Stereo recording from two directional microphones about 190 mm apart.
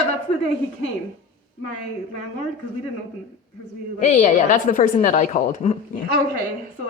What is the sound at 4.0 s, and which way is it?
Speech, 40° left (ahead or behind).